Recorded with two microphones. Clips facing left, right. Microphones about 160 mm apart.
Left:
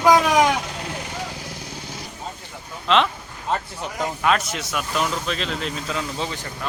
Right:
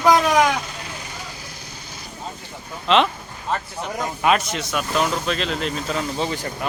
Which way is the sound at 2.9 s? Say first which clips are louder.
Right 2 dB; centre (ahead or behind).